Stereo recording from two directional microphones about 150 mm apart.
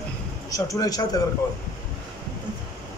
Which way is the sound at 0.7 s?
25° left (ahead or behind).